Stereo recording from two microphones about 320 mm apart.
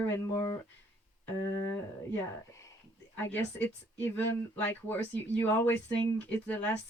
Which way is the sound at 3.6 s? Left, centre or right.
Centre.